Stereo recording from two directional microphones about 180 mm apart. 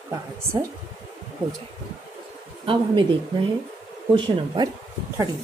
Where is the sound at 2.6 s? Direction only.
25° right (ahead or behind).